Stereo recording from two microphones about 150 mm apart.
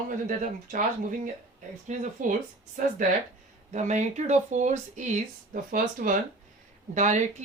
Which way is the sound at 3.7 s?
50° right (ahead or behind).